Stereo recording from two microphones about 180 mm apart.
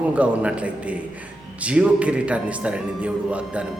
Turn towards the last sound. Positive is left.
turn(degrees=-5)  # may be behind; listen again after turning